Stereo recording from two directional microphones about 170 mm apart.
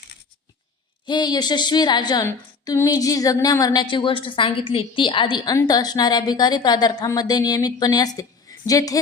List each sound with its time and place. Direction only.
1.0 s a woman's voice: 25° left (ahead or behind)